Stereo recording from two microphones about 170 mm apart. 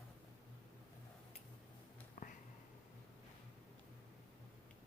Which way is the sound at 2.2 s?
50° left (ahead or behind).